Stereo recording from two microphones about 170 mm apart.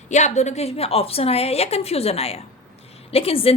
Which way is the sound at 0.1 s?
45° left (ahead or behind).